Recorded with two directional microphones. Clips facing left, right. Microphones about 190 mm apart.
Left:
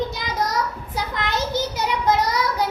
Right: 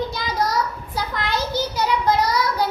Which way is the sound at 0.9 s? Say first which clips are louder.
Right 1 dB; 20° left (ahead or behind).